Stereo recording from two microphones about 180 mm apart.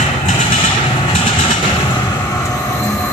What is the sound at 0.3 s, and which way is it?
Vehicle, 30° left (ahead or behind).